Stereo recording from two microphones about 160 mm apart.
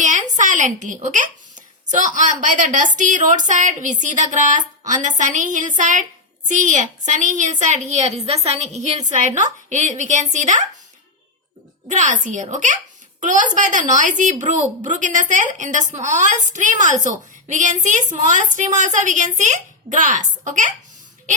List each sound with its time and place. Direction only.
0.0 s speech: 50° right (ahead or behind)
11.9 s speech: 50° right (ahead or behind)